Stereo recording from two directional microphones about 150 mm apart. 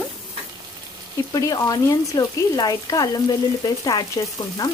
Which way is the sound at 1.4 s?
25° left (ahead or behind).